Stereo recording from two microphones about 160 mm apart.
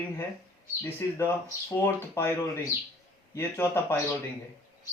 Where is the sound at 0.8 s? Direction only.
15° left (ahead or behind).